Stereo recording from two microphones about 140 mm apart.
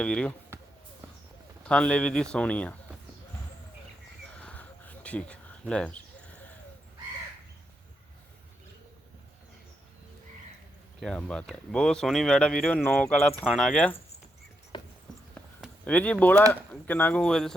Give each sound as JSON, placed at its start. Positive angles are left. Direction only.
{"t": 0.0, "sound": "speech", "side_deg": 5}
{"t": 1.6, "sound": "speech", "side_deg": 5}
{"t": 4.4, "sound": "a sound", "side_deg": 10}
{"t": 11.0, "sound": "speech", "side_deg": 5}
{"t": 14.7, "sound": "horse", "side_deg": 35}
{"t": 15.8, "sound": "speech", "side_deg": 10}